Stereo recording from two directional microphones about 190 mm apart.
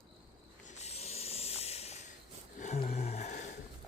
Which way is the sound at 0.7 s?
35° left (ahead or behind).